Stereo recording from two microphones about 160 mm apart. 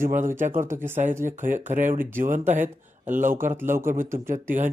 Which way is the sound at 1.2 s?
55° right (ahead or behind).